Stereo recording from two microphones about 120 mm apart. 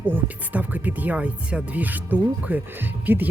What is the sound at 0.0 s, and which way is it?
Speech, 15° right (ahead or behind).